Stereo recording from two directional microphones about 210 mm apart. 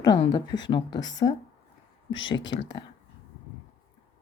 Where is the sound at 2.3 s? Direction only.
60° left (ahead or behind).